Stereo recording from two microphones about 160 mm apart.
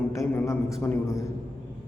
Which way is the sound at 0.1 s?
20° left (ahead or behind).